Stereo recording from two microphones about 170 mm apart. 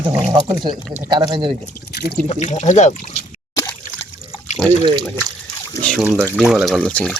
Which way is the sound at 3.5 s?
20° left (ahead or behind).